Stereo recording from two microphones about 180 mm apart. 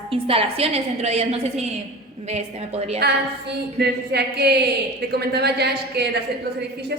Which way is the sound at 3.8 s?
65° right (ahead or behind).